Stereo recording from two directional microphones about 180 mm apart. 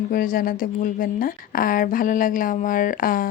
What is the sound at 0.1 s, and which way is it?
Speech, 50° left (ahead or behind).